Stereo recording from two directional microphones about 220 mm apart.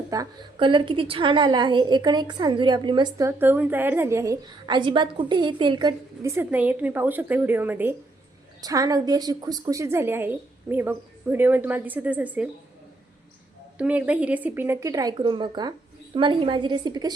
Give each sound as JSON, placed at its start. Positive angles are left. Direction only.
{"t": 0.1, "sound": "a woman's voice", "side_deg": -20}
{"t": 13.7, "sound": "a woman's voice", "side_deg": -5}